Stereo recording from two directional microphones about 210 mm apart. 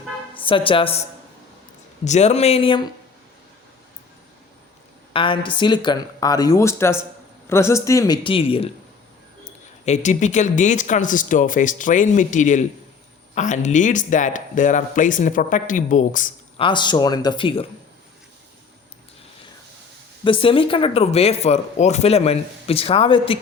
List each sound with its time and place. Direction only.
0.3 s a woman's voice: 25° left (ahead or behind)
2.0 s speech: 30° left (ahead or behind)
5.1 s speech: 25° left (ahead or behind)
16.6 s speech: 20° left (ahead or behind)
20.2 s speech: 25° left (ahead or behind)